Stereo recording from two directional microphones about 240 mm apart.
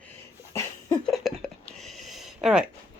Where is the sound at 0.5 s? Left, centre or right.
Centre.